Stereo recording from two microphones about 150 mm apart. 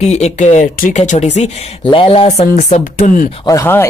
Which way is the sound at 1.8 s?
35° left (ahead or behind).